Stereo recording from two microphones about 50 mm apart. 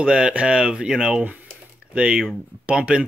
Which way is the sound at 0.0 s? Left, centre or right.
Centre.